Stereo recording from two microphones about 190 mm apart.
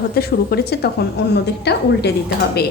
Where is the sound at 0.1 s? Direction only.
55° left (ahead or behind).